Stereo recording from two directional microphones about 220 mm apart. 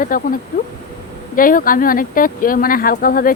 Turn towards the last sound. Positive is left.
turn(degrees=40)  # may be behind; listen again after turning